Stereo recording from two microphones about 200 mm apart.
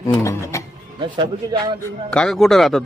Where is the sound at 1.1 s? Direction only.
25° right (ahead or behind).